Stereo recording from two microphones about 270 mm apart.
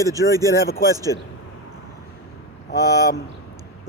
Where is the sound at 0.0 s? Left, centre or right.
Centre.